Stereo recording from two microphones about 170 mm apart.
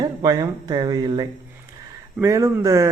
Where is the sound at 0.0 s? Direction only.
20° right (ahead or behind).